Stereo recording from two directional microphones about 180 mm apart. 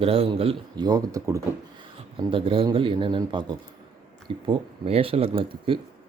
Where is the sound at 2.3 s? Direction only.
30° right (ahead or behind).